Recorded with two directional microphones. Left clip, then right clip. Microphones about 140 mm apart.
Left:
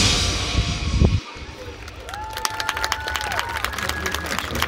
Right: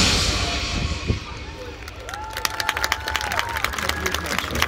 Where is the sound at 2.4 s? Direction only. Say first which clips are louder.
Right 1 dB; 65° right (ahead or behind).